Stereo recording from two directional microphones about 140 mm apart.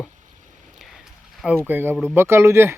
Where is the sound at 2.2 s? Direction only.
20° right (ahead or behind).